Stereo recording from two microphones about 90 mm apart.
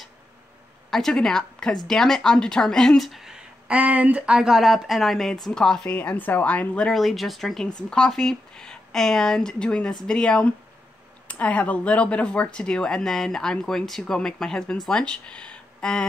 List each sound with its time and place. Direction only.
0.8 s a woman's voice: 5° left (ahead or behind)
5.9 s speech: 20° left (ahead or behind)
6.9 s speech: centre (ahead or behind)